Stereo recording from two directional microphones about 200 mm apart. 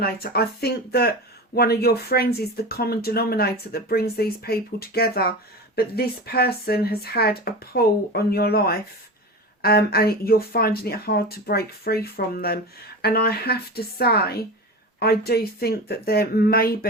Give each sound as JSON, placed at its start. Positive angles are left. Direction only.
{"t": 0.0, "sound": "speech", "side_deg": 50}